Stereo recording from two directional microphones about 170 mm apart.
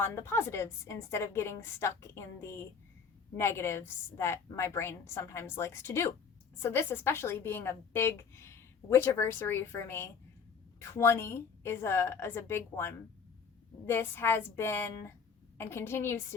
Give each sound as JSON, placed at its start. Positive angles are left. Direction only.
{"t": 0.0, "sound": "a woman's voice", "side_deg": 15}